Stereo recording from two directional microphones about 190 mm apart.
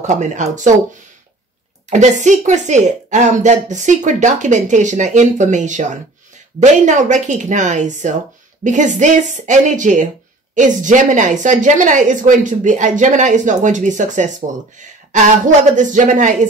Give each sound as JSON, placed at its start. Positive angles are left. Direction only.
{"t": 0.0, "sound": "speech", "side_deg": -40}
{"t": 1.9, "sound": "speech", "side_deg": -40}
{"t": 15.7, "sound": "speech", "side_deg": -40}